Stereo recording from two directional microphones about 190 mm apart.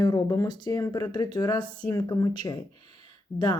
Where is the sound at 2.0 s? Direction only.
20° left (ahead or behind).